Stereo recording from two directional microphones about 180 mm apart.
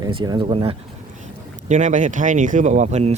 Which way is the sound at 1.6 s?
45° right (ahead or behind).